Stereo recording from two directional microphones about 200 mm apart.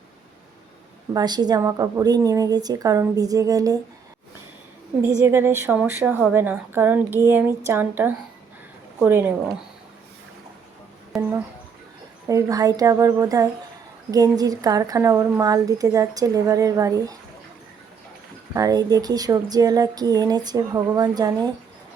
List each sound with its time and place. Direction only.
1.1 s a woman's voice: 20° right (ahead or behind)
5.0 s a woman's voice: 10° right (ahead or behind)
12.3 s a woman's voice: 15° right (ahead or behind)
18.5 s a woman's voice: 20° right (ahead or behind)